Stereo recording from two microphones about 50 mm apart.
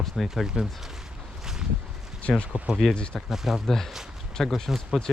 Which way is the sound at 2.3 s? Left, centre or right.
Centre.